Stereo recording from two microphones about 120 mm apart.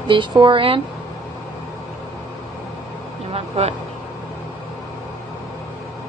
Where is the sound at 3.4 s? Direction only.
60° right (ahead or behind).